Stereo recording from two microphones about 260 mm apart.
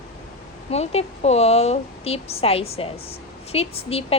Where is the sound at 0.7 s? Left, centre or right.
Left.